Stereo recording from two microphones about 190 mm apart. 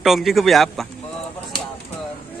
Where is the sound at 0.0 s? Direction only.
Centre (ahead or behind).